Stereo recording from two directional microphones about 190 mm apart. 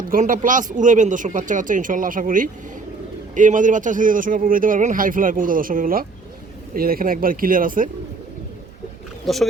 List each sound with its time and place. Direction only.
0.1 s speech: 45° right (ahead or behind)
9.2 s speech: centre (ahead or behind)